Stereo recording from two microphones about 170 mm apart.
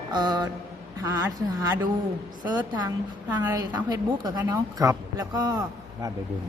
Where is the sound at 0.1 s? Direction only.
25° right (ahead or behind).